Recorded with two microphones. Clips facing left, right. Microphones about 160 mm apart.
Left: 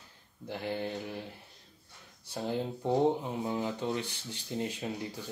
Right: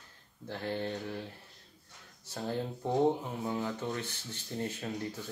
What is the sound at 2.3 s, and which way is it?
Speech, 15° left (ahead or behind).